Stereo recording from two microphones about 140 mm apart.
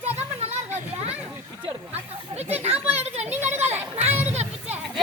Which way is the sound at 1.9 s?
50° right (ahead or behind).